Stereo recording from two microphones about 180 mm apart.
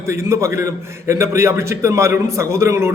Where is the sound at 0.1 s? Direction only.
15° right (ahead or behind).